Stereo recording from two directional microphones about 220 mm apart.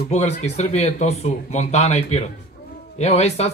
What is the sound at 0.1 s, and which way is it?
Speech, 30° left (ahead or behind).